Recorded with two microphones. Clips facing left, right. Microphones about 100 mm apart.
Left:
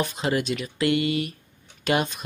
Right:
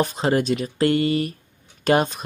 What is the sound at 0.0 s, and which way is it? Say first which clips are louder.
Speech: right 5 dB; 40° right (ahead or behind).